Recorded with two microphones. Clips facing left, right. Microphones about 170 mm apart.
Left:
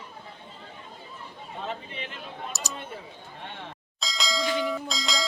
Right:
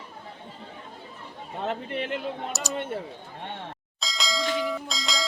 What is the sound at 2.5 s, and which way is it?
Speech, centre (ahead or behind).